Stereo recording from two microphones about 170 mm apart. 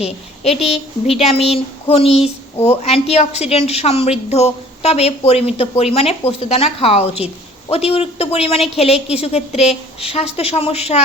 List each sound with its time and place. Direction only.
0.5 s speech: centre (ahead or behind)
1.2 s a woman's voice: 35° left (ahead or behind)